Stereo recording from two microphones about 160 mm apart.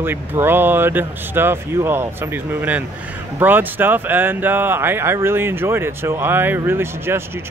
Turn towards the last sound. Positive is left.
turn(degrees=-15)  # may be behind; listen again after turning